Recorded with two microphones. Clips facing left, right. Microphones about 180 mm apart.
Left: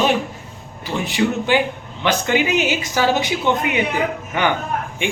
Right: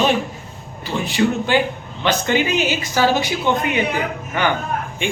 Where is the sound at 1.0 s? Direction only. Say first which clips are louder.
Even; 15° left (ahead or behind).